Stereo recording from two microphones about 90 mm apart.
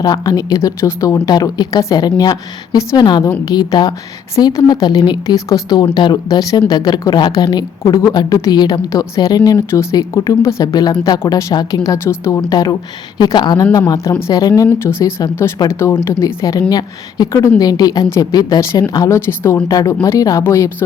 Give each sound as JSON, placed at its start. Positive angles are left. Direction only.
{"t": 0.0, "sound": "speech", "side_deg": 45}
{"t": 5.8, "sound": "speech", "side_deg": 55}
{"t": 11.3, "sound": "a woman's voice", "side_deg": 35}
{"t": 12.0, "sound": "speech", "side_deg": 30}
{"t": 12.5, "sound": "speech", "side_deg": 45}
{"t": 13.7, "sound": "a woman's voice", "side_deg": 40}
{"t": 14.8, "sound": "a woman's voice", "side_deg": 30}
{"t": 15.6, "sound": "speech", "side_deg": 55}
{"t": 16.0, "sound": "a woman's voice", "side_deg": 40}
{"t": 18.0, "sound": "a woman's voice", "side_deg": 30}
{"t": 18.3, "sound": "a woman's voice", "side_deg": 45}